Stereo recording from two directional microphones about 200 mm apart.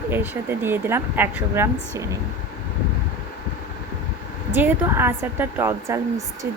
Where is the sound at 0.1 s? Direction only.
10° right (ahead or behind).